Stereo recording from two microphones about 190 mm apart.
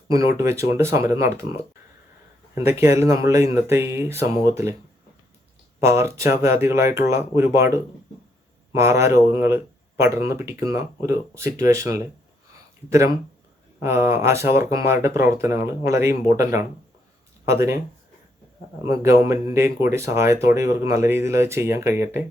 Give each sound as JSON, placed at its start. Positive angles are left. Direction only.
{"t": 0.1, "sound": "speech", "side_deg": -15}
{"t": 2.6, "sound": "speech", "side_deg": -15}
{"t": 5.8, "sound": "speech", "side_deg": -15}
{"t": 13.8, "sound": "speech", "side_deg": -15}
{"t": 18.9, "sound": "speech", "side_deg": -15}